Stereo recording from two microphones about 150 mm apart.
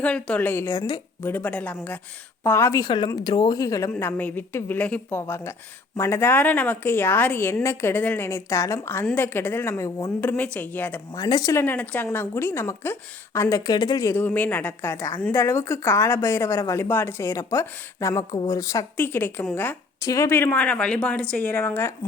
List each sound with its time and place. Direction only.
0.0 s speech: 10° left (ahead or behind); by 1.0 s 25° left (ahead or behind)
1.2 s speech: 10° left (ahead or behind)
3.9 s speech: 10° left (ahead or behind)
11.1 s speech: 25° left (ahead or behind)